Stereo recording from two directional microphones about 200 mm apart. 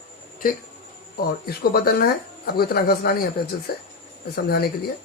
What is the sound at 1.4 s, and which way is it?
Speech, 50° left (ahead or behind).